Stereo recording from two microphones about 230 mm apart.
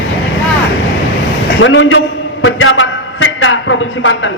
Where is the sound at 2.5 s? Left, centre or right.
Left.